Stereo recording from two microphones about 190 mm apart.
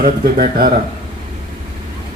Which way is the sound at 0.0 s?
50° right (ahead or behind).